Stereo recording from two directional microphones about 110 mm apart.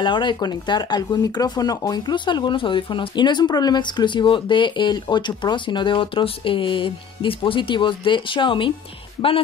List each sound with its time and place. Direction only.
0.0 s speech: 45° left (ahead or behind)